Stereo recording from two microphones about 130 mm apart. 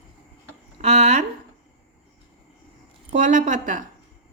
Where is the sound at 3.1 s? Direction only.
75° right (ahead or behind).